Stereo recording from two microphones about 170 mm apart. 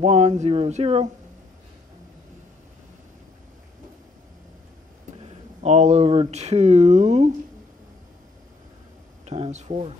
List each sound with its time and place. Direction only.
0.0 s speech: 40° right (ahead or behind)
5.6 s speech: 40° right (ahead or behind)
9.2 s speech: 40° right (ahead or behind)